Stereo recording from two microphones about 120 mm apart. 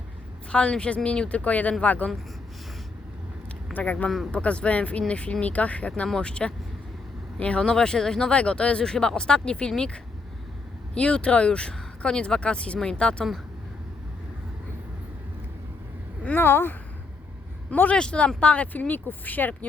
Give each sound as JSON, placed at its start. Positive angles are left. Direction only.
{"t": 0.5, "sound": "speech", "side_deg": 10}
{"t": 3.8, "sound": "speech", "side_deg": 10}
{"t": 4.1, "sound": "speech", "side_deg": 0}
{"t": 16.2, "sound": "speech", "side_deg": 15}